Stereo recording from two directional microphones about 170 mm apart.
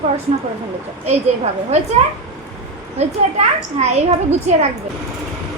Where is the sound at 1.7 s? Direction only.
40° right (ahead or behind).